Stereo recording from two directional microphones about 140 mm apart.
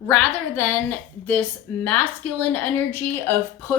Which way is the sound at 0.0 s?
15° left (ahead or behind).